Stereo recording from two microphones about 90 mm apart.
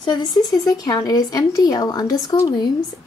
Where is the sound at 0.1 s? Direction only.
50° left (ahead or behind).